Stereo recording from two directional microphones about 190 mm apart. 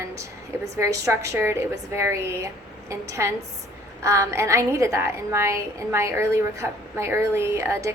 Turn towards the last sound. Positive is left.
turn(degrees=-15)  # may be behind; listen again after turning